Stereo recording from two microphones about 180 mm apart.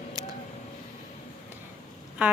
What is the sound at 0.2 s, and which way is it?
Vehicle, 20° right (ahead or behind).